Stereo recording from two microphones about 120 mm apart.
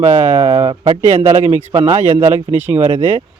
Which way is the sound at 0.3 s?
55° right (ahead or behind).